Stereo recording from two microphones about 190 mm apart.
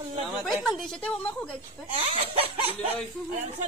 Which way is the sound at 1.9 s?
30° right (ahead or behind).